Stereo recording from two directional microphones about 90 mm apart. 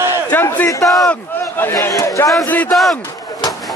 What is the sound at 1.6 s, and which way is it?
Speech, 25° left (ahead or behind).